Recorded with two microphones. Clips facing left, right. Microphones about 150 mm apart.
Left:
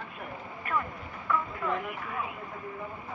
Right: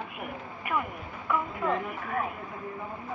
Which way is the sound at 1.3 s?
20° right (ahead or behind).